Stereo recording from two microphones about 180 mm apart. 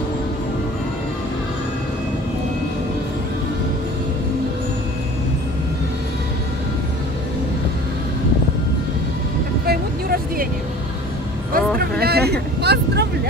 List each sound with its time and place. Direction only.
9.7 s vehicle: 55° right (ahead or behind)
11.5 s vehicle: 60° right (ahead or behind)